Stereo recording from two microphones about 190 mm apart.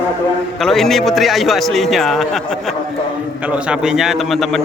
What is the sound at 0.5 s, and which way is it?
A man's voice, centre (ahead or behind).